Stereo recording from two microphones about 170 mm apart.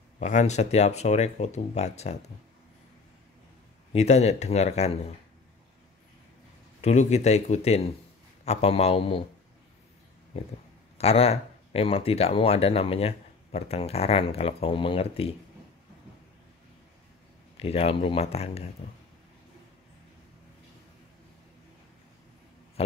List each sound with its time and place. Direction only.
0.2 s speech: 45° left (ahead or behind)
3.9 s speech: 40° left (ahead or behind)
6.8 s speech: 40° left (ahead or behind)
11.0 s speech: 35° left (ahead or behind)
17.6 s speech: 35° left (ahead or behind)